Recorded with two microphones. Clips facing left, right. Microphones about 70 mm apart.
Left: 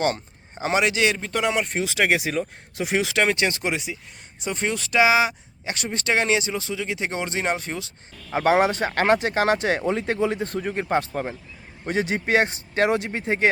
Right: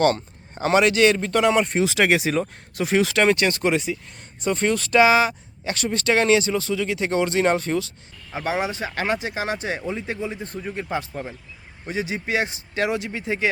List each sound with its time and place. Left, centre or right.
0.0 s speech: centre
8.3 s speech: left
10.7 s a man's voice: left